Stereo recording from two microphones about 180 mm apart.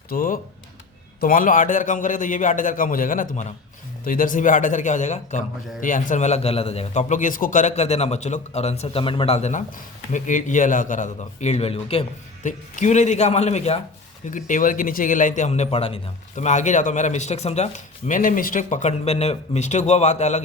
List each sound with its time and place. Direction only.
0.1 s a man's voice: 50° left (ahead or behind); by 12.0 s 30° left (ahead or behind)
12.4 s a man's voice: 45° left (ahead or behind)
18.1 s a man's voice: 50° left (ahead or behind)